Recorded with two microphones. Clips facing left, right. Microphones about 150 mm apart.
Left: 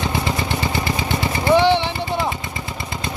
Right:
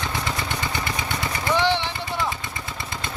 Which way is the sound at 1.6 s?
15° left (ahead or behind).